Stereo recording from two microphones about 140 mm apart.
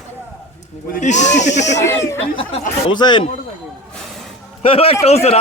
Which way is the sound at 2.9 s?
30° left (ahead or behind).